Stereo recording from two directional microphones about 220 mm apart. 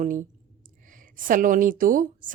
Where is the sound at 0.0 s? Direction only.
35° right (ahead or behind).